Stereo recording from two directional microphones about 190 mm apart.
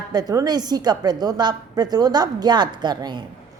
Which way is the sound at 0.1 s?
20° right (ahead or behind).